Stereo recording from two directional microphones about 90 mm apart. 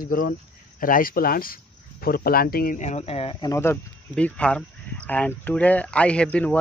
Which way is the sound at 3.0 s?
90° left.